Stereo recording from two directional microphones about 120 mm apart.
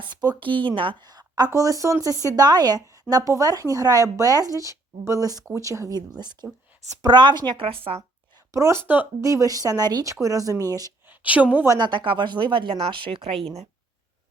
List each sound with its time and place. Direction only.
0.0 s speech: 40° right (ahead or behind)
8.5 s speech: 25° right (ahead or behind)
11.1 s speech: 10° right (ahead or behind)
11.7 s speech: 40° right (ahead or behind); by 13.7 s 60° right (ahead or behind)